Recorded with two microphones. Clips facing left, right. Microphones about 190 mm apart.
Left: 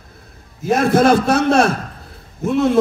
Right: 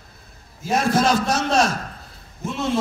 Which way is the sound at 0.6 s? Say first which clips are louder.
Left 6 dB; 55° left (ahead or behind).